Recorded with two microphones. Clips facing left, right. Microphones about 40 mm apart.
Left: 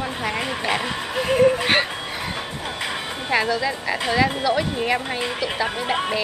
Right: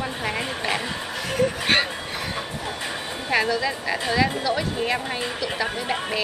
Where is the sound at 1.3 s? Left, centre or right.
Left.